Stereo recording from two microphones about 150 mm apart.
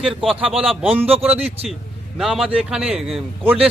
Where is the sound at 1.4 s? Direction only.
45° right (ahead or behind).